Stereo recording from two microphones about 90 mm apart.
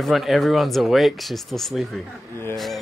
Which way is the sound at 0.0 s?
Centre (ahead or behind).